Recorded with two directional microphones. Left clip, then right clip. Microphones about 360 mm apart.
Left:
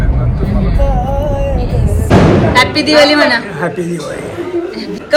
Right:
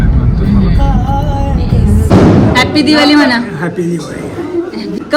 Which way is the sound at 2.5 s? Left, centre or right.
Centre.